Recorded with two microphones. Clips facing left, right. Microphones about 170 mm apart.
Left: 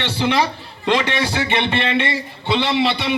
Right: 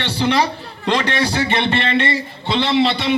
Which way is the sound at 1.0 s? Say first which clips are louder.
Right 2 dB; 15° left (ahead or behind).